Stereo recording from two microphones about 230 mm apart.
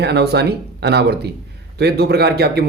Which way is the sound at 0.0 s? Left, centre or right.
Right.